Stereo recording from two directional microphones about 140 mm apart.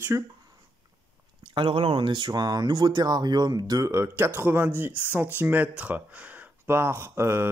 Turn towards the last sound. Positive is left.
turn(degrees=-15)  # may be behind; listen again after turning